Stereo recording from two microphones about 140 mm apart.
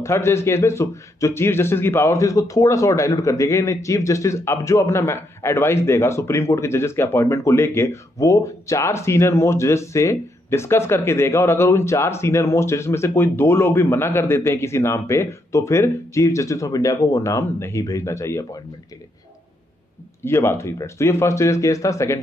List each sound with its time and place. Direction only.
0.0 s a man's voice: 20° left (ahead or behind)
20.2 s a man's voice: 20° left (ahead or behind)